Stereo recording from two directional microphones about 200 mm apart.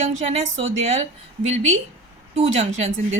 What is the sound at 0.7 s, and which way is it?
Speech, 35° right (ahead or behind).